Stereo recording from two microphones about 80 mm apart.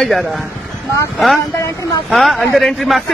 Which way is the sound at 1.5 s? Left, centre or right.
Left.